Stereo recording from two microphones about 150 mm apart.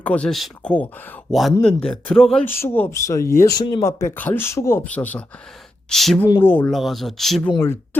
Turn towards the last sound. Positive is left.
turn(degrees=15)  # may be behind; listen again after turning